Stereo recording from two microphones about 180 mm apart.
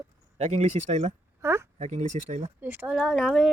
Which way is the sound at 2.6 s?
10° right (ahead or behind).